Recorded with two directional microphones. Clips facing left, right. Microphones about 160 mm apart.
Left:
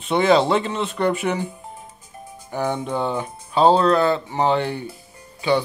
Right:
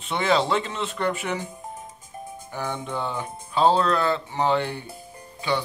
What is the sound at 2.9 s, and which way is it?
Speech, 20° left (ahead or behind).